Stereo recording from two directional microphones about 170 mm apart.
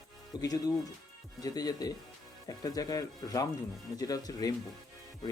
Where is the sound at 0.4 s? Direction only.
20° left (ahead or behind).